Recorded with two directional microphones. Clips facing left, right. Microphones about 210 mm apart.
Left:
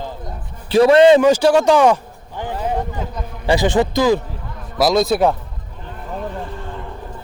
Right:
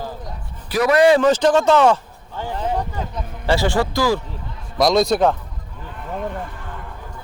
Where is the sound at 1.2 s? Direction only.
10° left (ahead or behind).